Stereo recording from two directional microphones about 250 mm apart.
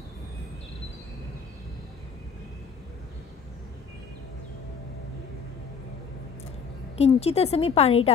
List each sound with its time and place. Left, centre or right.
7.0 s a woman's voice: left